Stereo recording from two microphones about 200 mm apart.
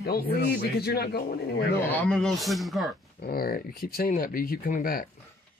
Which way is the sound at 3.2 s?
50° left (ahead or behind).